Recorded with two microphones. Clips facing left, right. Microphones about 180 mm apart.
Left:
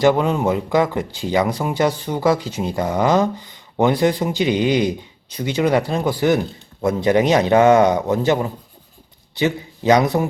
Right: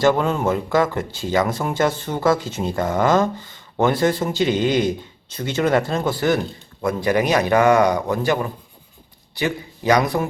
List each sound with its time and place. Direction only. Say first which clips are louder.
0.0 s a man's voice: left 2 dB; 15° left (ahead or behind)